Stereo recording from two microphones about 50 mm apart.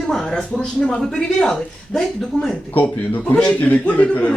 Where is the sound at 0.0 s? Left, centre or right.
Centre.